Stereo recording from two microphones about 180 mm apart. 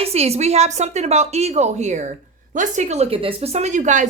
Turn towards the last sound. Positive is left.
turn(degrees=-45)  # may be behind; listen again after turning